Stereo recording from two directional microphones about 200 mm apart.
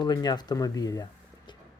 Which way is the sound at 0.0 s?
20° left (ahead or behind).